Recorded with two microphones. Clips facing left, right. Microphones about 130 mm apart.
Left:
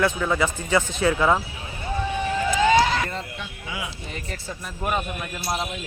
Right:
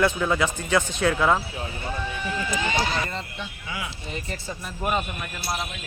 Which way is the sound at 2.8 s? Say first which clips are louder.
Left 4 dB; 90° left.